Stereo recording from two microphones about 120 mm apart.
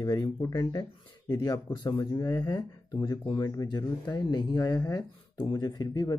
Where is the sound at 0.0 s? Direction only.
35° left (ahead or behind).